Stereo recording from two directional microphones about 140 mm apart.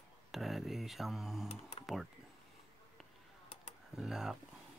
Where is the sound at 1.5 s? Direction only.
50° left (ahead or behind).